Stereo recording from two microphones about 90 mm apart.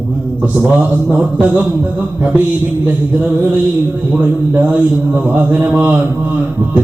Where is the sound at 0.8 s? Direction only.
15° right (ahead or behind).